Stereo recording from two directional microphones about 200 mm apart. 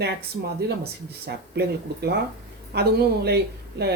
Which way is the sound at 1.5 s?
55° right (ahead or behind).